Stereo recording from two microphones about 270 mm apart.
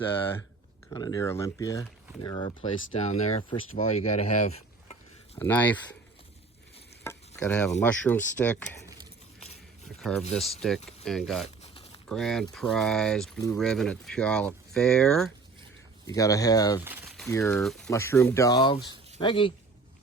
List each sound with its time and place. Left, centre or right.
0.9 s speech: centre
5.4 s speech: centre
7.0 s a sound: centre
10.0 s speech: centre
11.4 s a sound: left
12.0 s speech: centre
16.8 s speech: centre